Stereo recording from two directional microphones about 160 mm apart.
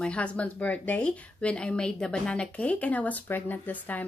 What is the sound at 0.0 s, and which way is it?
Speech, 5° left (ahead or behind).